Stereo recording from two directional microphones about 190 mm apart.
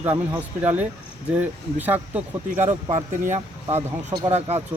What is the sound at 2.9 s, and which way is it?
Speech, 40° right (ahead or behind).